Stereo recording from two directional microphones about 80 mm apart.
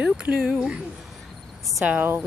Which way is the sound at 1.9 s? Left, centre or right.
Right.